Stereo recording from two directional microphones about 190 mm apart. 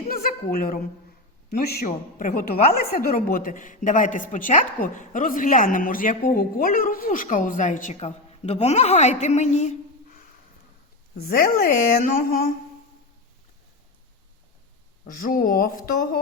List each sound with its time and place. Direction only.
0.1 s a sound: 50° left (ahead or behind)
1.5 s a man's voice: 55° left (ahead or behind)
1.9 s a woman's voice: 45° left (ahead or behind)
11.3 s a woman's voice: 50° left (ahead or behind)
15.0 s a woman's voice: 45° left (ahead or behind)